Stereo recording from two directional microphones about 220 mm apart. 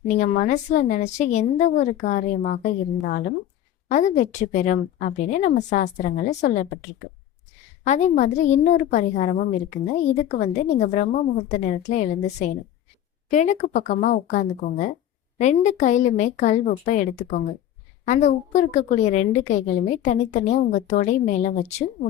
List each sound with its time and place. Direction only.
0.1 s a woman's voice: 35° left (ahead or behind)
7.9 s a woman's voice: 30° left (ahead or behind)